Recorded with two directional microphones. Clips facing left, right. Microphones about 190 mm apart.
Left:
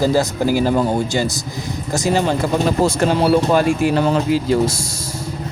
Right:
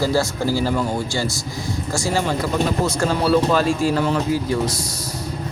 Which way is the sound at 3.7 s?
60° left (ahead or behind).